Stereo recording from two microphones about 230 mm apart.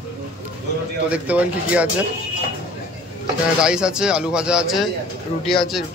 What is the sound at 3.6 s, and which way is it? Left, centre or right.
A man's voice, centre.